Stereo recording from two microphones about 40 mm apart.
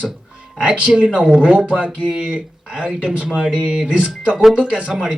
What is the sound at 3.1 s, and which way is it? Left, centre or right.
Speech, right.